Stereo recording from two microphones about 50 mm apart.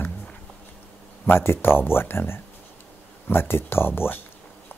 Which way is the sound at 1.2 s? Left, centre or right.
Left.